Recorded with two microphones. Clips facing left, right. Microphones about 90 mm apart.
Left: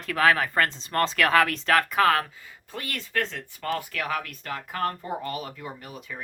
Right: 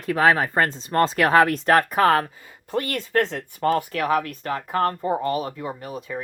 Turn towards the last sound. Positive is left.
turn(degrees=-30)  # may be behind; listen again after turning